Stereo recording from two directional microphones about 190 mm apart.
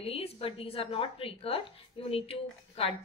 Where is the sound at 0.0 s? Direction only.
30° left (ahead or behind).